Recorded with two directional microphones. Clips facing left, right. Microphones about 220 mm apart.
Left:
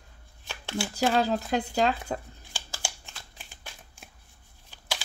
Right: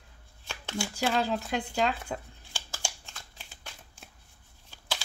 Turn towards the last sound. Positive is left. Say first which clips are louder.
# left 1 dB
turn(degrees=15)  # may be behind; listen again after turning